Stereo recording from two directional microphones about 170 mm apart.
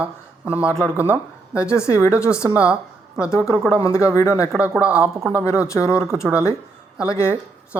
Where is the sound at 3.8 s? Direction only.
15° left (ahead or behind).